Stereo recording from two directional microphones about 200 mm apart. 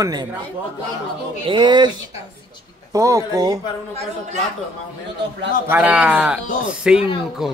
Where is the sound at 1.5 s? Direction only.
25° right (ahead or behind).